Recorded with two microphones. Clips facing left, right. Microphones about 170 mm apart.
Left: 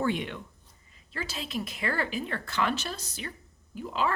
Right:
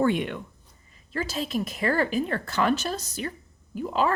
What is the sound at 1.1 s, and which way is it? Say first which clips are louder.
A woman's voice: right 7 dB; 45° right (ahead or behind).